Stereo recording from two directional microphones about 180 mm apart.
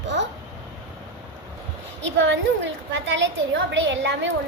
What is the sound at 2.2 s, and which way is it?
A woman's voice, 90° right.